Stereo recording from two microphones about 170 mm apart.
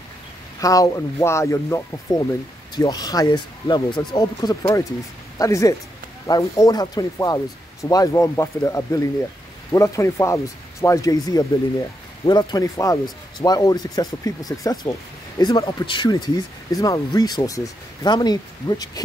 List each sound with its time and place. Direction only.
0.6 s speech: 20° left (ahead or behind)